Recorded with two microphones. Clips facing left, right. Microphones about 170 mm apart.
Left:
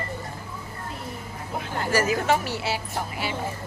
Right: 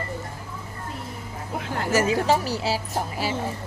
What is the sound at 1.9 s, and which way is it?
Speech, 25° right (ahead or behind).